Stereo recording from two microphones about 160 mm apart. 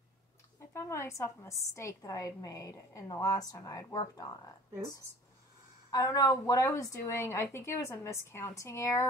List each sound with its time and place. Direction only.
0.6 s a woman's voice: 15° left (ahead or behind)
5.9 s a woman's voice: 20° left (ahead or behind)